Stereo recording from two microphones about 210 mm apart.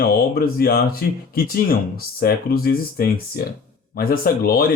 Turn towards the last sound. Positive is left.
turn(degrees=45)  # may be behind; listen again after turning